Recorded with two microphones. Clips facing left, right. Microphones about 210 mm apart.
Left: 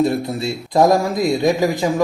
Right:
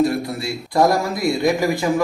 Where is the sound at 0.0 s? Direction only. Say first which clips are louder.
Left 1 dB; 25° left (ahead or behind).